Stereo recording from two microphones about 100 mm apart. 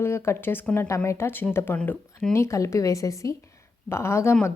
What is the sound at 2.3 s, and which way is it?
A woman's voice, 30° left (ahead or behind).